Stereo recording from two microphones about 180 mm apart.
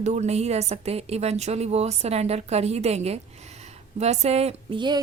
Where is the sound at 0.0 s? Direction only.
40° right (ahead or behind).